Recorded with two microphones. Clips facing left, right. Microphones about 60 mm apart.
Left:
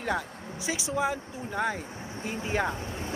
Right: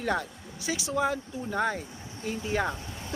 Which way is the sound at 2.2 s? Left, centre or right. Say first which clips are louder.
Even; left.